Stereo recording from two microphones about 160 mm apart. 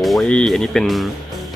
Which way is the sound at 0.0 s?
Centre (ahead or behind).